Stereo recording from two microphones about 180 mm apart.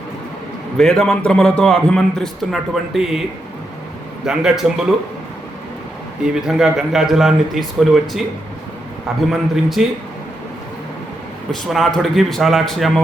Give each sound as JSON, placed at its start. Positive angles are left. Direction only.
{"t": 0.8, "sound": "a man's voice", "side_deg": 0}
{"t": 4.3, "sound": "a man's voice", "side_deg": 0}
{"t": 6.2, "sound": "a man's voice", "side_deg": 0}
{"t": 9.2, "sound": "a man's voice", "side_deg": 0}
{"t": 11.7, "sound": "a man's voice", "side_deg": 0}